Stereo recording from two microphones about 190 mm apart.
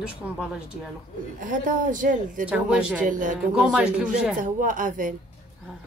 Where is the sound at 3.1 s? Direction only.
45° right (ahead or behind).